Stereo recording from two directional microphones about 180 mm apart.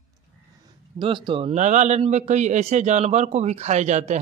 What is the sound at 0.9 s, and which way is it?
A man's voice, 25° right (ahead or behind).